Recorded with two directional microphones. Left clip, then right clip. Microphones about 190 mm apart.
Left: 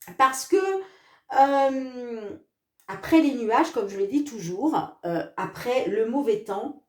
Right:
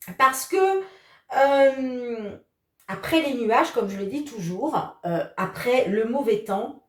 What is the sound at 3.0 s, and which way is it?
Speech, 35° left (ahead or behind).